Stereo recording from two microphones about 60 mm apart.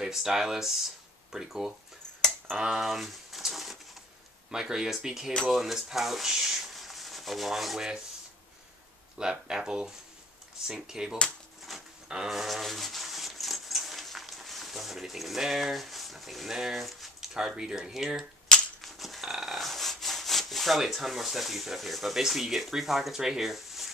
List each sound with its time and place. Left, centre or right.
0.0 s speech: centre
2.5 s a sound: centre
4.5 s speech: centre
5.5 s rub: centre
9.2 s speech: centre
11.7 s a sound: centre
17.5 s speech: centre
18.8 s rub: centre